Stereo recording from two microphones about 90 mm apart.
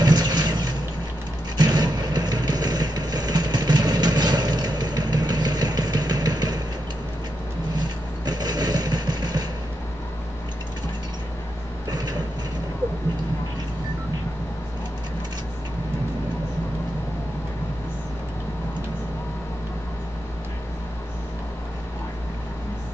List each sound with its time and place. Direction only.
0.0 s toilet flush: 50° right (ahead or behind)
1.6 s vehicle: 50° right (ahead or behind)
8.3 s vehicle: 50° right (ahead or behind)
11.9 s train: 50° right (ahead or behind)